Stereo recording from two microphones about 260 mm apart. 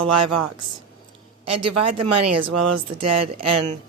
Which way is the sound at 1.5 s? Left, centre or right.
Right.